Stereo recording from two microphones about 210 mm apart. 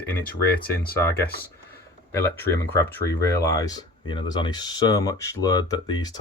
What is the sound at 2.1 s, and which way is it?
Speech, 10° left (ahead or behind).